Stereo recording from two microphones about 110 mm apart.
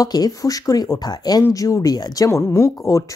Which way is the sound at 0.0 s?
35° left (ahead or behind).